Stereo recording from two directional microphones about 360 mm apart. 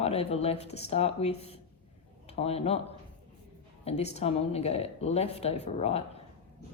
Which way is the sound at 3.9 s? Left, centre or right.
Centre.